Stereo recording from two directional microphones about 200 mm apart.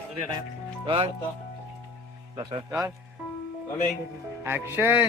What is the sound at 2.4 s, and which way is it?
Speech, 25° right (ahead or behind).